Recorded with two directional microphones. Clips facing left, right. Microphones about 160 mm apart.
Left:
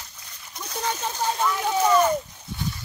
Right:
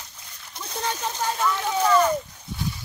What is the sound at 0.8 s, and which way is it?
Speech, 15° left (ahead or behind).